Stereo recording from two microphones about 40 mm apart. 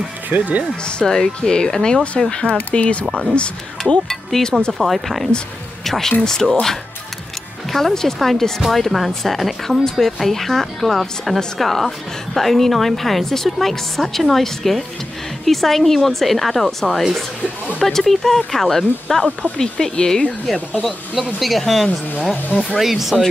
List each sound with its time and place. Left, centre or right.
0.3 s speech: right
1.0 s speech: centre; by 3.1 s left
3.8 s speech: centre
4.5 s speech: left
4.7 s a woman's voice: centre
7.7 s a woman's voice: centre
21.1 s a woman's voice: centre